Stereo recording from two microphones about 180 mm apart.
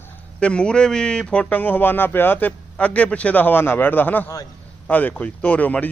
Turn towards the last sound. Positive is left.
turn(degrees=10)  # may be behind; listen again after turning